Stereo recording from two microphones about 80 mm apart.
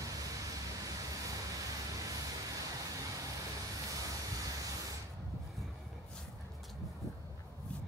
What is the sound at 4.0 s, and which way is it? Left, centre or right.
Vehicle, right.